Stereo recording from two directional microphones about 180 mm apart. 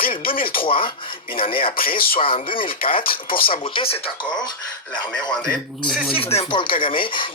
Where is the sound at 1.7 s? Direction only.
55° left (ahead or behind).